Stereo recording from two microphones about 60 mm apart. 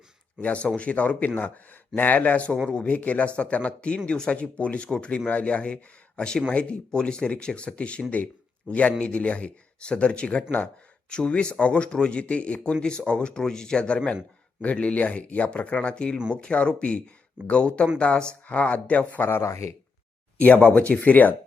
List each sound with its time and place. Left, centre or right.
0.3 s speech: left
19.3 s speech: left
20.4 s speech: left